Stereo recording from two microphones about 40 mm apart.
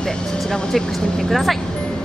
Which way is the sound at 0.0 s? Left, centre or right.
Centre.